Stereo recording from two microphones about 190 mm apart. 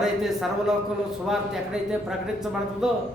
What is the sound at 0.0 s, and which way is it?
A man's voice, centre (ahead or behind).